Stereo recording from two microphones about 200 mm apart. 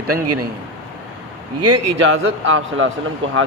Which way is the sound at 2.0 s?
80° right.